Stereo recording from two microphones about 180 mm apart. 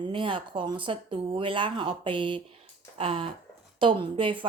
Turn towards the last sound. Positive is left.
turn(degrees=-30)  # may be behind; listen again after turning